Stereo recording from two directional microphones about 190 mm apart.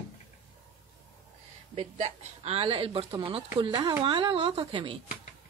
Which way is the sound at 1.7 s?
30° right (ahead or behind).